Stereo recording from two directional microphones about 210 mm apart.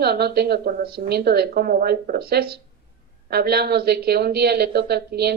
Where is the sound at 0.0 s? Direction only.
50° right (ahead or behind).